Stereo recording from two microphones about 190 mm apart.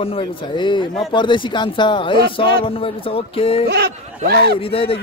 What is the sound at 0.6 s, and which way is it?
Speech, 25° left (ahead or behind).